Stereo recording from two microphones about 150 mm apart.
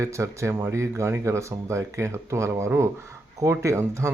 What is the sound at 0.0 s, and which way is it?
Speech, 20° right (ahead or behind).